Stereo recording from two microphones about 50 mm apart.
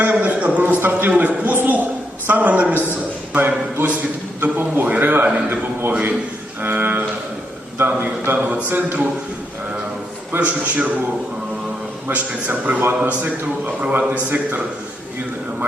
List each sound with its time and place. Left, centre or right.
0.0 s a sound: right
0.8 s a man's voice: right
4.5 s a sound: right
5.9 s a man's voice: right
6.6 s a sound: right
7.8 s a man's voice: right
8.4 s speech: right
10.3 s a man's voice: right
12.1 s a man's voice: right